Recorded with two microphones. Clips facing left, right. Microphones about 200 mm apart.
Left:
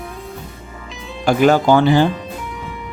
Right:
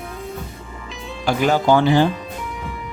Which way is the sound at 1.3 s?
50° left (ahead or behind).